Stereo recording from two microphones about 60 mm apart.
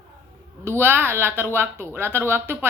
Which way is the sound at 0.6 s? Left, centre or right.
Right.